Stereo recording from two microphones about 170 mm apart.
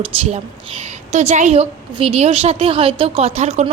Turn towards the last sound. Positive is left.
turn(degrees=-40)  # may be behind; listen again after turning